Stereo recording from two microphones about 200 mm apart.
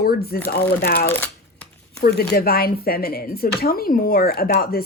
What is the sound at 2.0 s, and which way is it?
A woman's voice, 50° left (ahead or behind).